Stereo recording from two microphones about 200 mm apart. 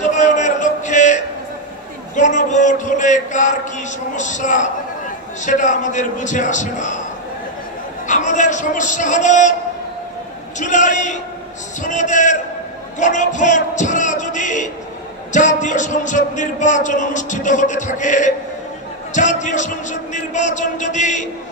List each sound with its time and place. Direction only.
0.0 s music: 35° left (ahead or behind)
2.1 s speech: 35° left (ahead or behind)
8.1 s speech: 40° left (ahead or behind)
10.6 s speech: 40° left (ahead or behind)